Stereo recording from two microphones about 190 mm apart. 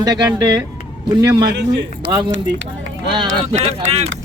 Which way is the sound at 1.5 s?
65° right (ahead or behind).